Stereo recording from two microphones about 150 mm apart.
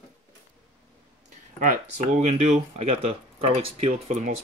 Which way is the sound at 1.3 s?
60° right (ahead or behind).